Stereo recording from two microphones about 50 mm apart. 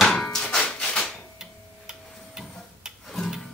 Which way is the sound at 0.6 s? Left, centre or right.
Left.